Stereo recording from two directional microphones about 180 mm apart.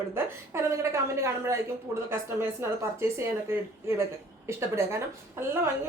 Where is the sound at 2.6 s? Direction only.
15° right (ahead or behind).